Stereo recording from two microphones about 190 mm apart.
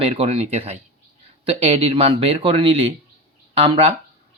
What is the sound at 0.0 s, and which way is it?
Speech, 30° right (ahead or behind).